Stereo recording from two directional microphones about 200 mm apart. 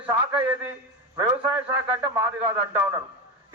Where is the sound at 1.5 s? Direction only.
10° right (ahead or behind).